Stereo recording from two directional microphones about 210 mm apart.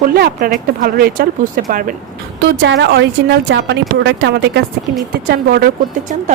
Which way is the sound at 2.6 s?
55° right (ahead or behind).